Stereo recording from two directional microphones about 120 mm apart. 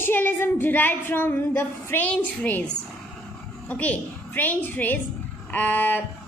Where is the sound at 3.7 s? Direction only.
15° left (ahead or behind).